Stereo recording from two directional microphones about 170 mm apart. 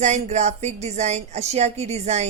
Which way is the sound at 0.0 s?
45° right (ahead or behind).